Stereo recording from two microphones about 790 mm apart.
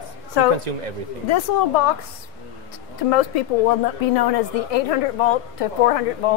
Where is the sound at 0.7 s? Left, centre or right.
Right.